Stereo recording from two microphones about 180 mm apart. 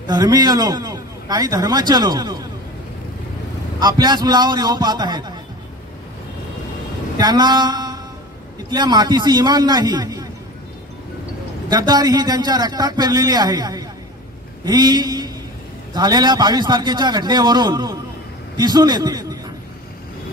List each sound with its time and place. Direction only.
0.1 s a man's voice: 20° right (ahead or behind)
3.8 s a man's voice: 25° right (ahead or behind)
7.2 s a sound: 25° right (ahead or behind)
8.6 s a man's voice: 25° right (ahead or behind)
11.7 s a man's voice: 20° right (ahead or behind)